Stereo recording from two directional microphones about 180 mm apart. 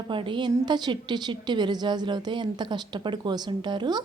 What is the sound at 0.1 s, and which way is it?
A woman's voice, 25° right (ahead or behind).